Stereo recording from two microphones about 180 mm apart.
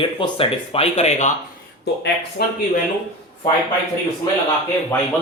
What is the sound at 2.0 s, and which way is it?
Speech, 65° left (ahead or behind).